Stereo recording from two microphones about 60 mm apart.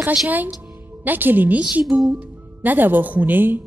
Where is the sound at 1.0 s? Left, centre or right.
Right.